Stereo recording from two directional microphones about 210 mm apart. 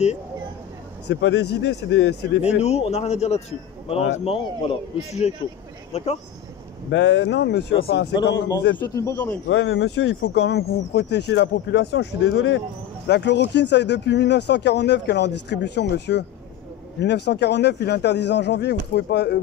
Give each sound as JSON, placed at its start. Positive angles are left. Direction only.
{"t": 1.0, "sound": "speech", "side_deg": 55}
{"t": 2.6, "sound": "speech", "side_deg": 30}
{"t": 6.9, "sound": "speech", "side_deg": 55}
{"t": 8.9, "sound": "speech", "side_deg": 15}
{"t": 9.5, "sound": "speech", "side_deg": 60}
{"t": 9.8, "sound": "speech", "side_deg": 80}
{"t": 10.5, "sound": "speech", "side_deg": 55}